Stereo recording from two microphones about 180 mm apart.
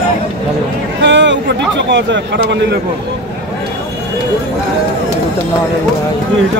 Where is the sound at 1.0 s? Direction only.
80° right.